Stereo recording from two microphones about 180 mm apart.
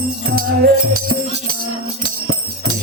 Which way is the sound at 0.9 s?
50° right (ahead or behind).